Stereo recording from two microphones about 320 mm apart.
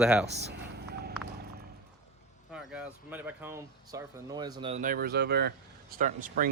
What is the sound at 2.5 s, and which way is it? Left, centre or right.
Speech, centre.